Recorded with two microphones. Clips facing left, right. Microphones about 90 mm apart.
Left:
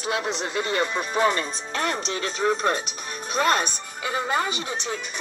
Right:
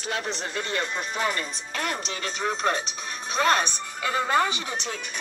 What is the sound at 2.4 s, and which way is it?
Speech, 40° left (ahead or behind).